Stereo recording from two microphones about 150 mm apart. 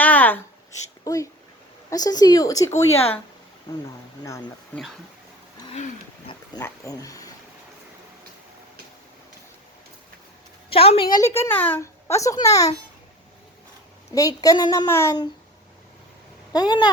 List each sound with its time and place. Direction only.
0.0 s a sound: 10° left (ahead or behind)
1.0 s a woman's voice: 20° left (ahead or behind)
4.7 s speech: 10° left (ahead or behind)
6.6 s a woman's voice: 20° left (ahead or behind)
10.7 s a woman's voice: 40° left (ahead or behind)
11.2 s a woman's voice: 15° left (ahead or behind)
14.1 s a woman's voice: 25° left (ahead or behind)
14.8 s speech: 15° left (ahead or behind)
16.5 s speech: 25° left (ahead or behind)